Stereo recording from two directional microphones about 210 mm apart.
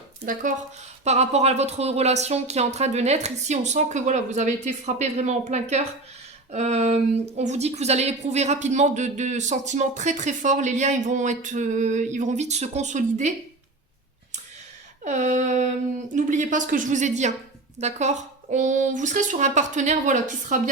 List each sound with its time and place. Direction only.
1.0 s speech: 30° right (ahead or behind)
15.0 s speech: 35° right (ahead or behind)